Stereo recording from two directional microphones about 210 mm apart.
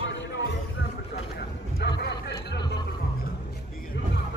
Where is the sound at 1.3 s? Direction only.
50° left (ahead or behind).